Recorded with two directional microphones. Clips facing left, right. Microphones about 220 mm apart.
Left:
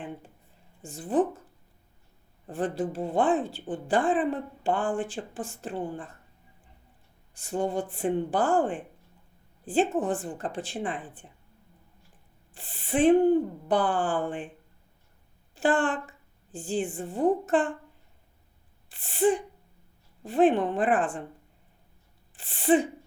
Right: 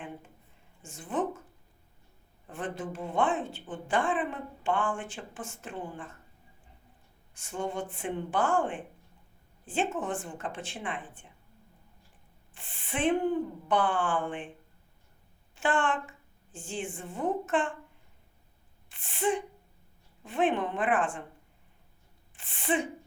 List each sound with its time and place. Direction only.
0.8 s a woman's voice: 35° left (ahead or behind)
2.5 s a woman's voice: 35° left (ahead or behind)
7.3 s a woman's voice: 35° left (ahead or behind)
12.5 s a woman's voice: 35° left (ahead or behind)
15.5 s a woman's voice: 35° left (ahead or behind)
18.9 s a woman's voice: 35° left (ahead or behind)
22.4 s a woman's voice: 35° left (ahead or behind)